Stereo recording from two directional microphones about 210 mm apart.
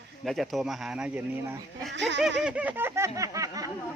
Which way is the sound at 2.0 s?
55° right (ahead or behind).